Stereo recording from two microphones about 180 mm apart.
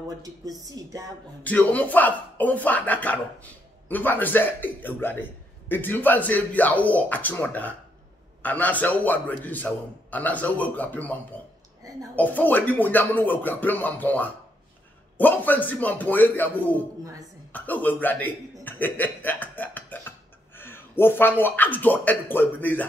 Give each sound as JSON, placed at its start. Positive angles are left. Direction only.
{"t": 0.2, "sound": "a woman's voice", "side_deg": -20}
{"t": 1.4, "sound": "a man's voice", "side_deg": 10}
{"t": 12.2, "sound": "a man's voice", "side_deg": 10}